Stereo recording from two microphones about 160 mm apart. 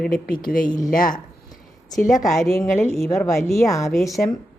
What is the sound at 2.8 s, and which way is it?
A woman's voice, 15° left (ahead or behind).